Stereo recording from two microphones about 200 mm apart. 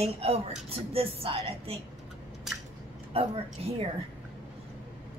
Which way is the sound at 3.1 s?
30° right (ahead or behind).